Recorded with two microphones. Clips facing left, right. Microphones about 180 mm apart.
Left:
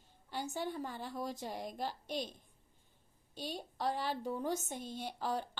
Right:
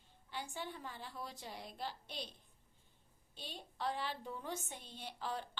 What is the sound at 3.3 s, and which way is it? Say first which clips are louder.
A woman's voice: left 8 dB; 40° left (ahead or behind).